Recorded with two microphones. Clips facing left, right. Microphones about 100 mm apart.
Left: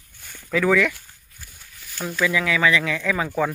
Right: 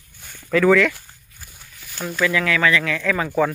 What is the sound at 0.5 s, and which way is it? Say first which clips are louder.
Speech: right 4 dB; 5° left (ahead or behind).